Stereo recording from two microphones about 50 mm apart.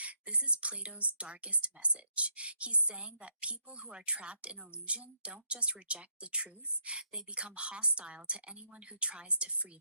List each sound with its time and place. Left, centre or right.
0.0 s speech: right